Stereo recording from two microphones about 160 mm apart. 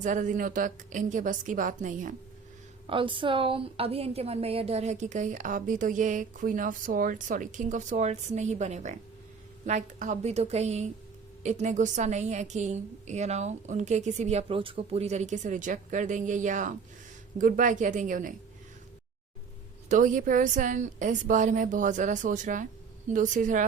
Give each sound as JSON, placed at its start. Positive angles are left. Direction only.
{"t": 0.0, "sound": "a woman's voice", "side_deg": -50}
{"t": 2.8, "sound": "a woman's voice", "side_deg": -35}
{"t": 19.9, "sound": "a woman's voice", "side_deg": -55}